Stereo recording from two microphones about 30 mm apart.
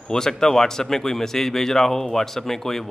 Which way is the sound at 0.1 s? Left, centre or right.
Centre.